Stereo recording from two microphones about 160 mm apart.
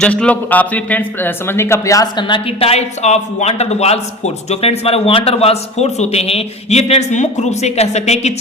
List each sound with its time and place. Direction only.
0.0 s speech: 5° left (ahead or behind); by 8.3 s 45° left (ahead or behind)